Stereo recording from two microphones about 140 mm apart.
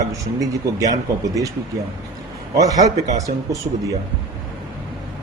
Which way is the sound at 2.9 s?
60° right (ahead or behind).